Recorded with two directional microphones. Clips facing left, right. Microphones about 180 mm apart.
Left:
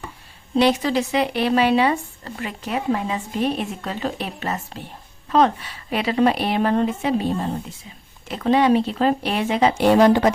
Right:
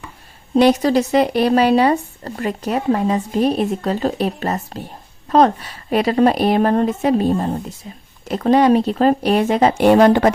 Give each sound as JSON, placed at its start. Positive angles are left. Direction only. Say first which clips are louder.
{"t": 0.5, "sound": "a woman's voice", "louder": "right 5 dB", "side_deg": -45}